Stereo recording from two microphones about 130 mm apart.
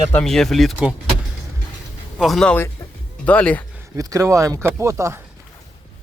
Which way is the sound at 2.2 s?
5° left (ahead or behind).